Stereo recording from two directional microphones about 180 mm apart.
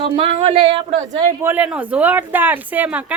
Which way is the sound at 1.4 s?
10° right (ahead or behind).